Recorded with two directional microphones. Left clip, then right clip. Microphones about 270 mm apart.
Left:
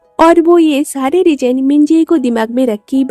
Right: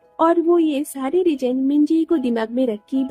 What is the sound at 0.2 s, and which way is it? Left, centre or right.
A woman's voice, left.